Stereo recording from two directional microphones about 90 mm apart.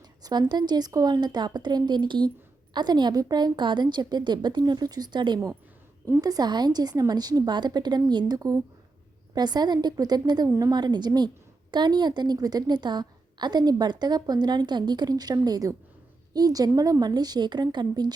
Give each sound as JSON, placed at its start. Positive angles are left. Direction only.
{"t": 0.2, "sound": "a woman's voice", "side_deg": -50}
{"t": 10.5, "sound": "a woman's voice", "side_deg": -40}
{"t": 10.8, "sound": "a woman's voice", "side_deg": -55}